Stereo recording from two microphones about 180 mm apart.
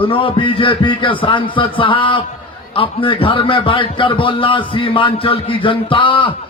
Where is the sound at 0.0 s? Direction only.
30° left (ahead or behind).